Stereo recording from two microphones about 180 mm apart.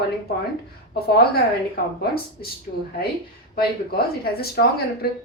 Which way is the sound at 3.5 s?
60° left (ahead or behind).